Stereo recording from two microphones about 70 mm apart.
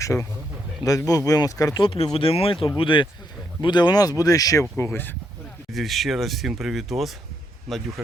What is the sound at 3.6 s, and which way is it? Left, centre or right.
Speech, left.